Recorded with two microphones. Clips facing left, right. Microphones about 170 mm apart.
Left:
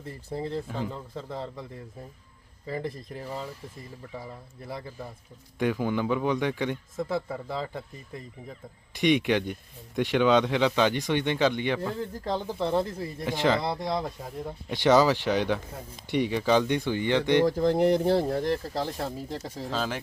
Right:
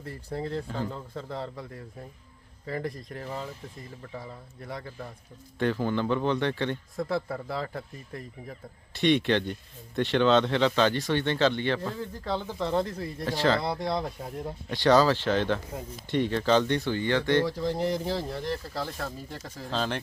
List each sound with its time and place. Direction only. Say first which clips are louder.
0.0 s speech: even; 5° left (ahead or behind)
2.6 s speech: even; 5° left (ahead or behind)
8.9 s speech: even; 15° left (ahead or behind)
13.6 s speech: even; centre (ahead or behind)
14.7 s speech: left 1 dB; 20° left (ahead or behind)
17.4 s speech: left 6 dB; 50° left (ahead or behind)
18.8 s speech: left 3 dB; 30° left (ahead or behind)
19.7 s speech: right 1 dB; 5° left (ahead or behind)